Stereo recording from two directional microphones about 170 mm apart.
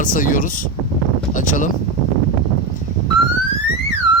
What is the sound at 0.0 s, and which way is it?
Speech, 50° left (ahead or behind).